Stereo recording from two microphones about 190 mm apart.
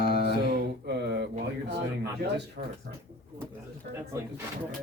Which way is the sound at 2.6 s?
50° right (ahead or behind).